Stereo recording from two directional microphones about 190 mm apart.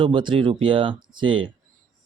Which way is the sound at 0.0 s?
25° right (ahead or behind).